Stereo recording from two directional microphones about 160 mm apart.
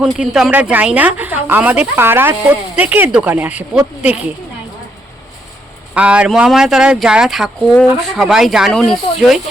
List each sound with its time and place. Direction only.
0.0 s speech: 5° right (ahead or behind)
5.9 s speech: 10° right (ahead or behind)